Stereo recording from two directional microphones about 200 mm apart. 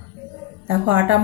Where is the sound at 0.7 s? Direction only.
10° right (ahead or behind).